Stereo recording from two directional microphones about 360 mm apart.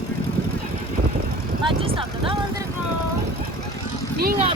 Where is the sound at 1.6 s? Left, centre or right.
Centre.